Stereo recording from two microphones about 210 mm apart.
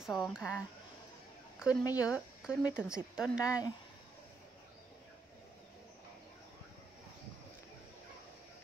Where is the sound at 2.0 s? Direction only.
5° right (ahead or behind).